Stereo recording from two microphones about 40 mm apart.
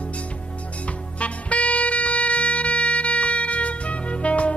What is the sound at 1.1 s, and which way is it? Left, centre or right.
Music, left.